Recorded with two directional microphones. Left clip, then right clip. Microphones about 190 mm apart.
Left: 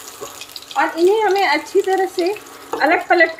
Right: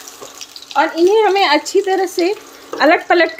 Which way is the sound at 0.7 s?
60° right (ahead or behind).